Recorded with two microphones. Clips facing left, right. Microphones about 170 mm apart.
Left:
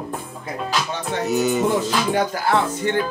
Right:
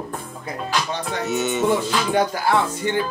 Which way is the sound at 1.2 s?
Centre (ahead or behind).